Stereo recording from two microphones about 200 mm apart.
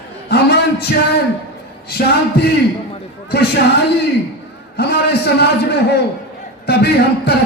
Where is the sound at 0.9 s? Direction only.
55° left (ahead or behind).